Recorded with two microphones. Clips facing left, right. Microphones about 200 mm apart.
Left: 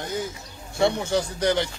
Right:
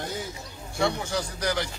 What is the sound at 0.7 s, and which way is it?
Speech, 25° left (ahead or behind).